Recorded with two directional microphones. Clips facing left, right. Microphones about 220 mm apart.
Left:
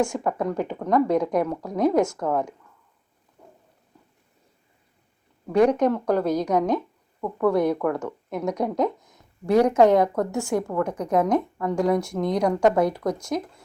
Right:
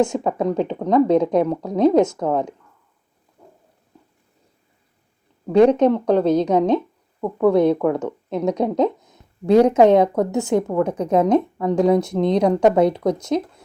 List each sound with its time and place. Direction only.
0.0 s a woman's voice: 20° right (ahead or behind)
5.5 s a woman's voice: 25° right (ahead or behind)